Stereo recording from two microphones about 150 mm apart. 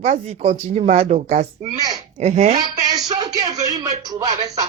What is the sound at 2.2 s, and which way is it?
Speech, 45° right (ahead or behind).